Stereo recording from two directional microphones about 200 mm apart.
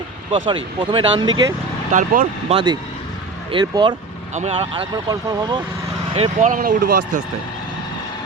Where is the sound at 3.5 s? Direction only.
25° right (ahead or behind).